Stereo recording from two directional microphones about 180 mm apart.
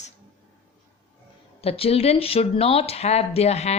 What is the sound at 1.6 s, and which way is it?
Speech, 35° left (ahead or behind).